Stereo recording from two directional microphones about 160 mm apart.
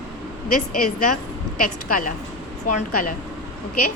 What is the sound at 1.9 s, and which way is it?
A woman's voice, 60° left (ahead or behind).